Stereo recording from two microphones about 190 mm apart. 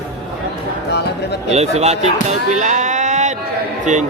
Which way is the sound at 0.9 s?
60° left (ahead or behind).